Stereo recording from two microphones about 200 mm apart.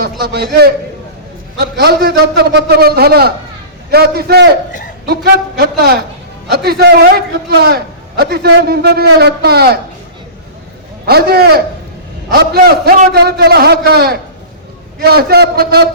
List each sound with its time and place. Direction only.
0.0 s a man's voice: 50° right (ahead or behind)
11.0 s a man's voice: 50° right (ahead or behind)